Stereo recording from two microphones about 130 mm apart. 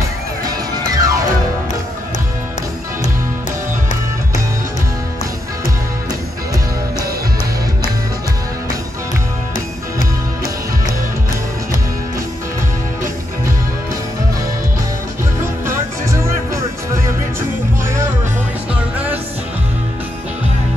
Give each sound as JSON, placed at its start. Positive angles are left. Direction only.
{"t": 0.5, "sound": "music", "side_deg": -30}
{"t": 15.6, "sound": "music", "side_deg": -20}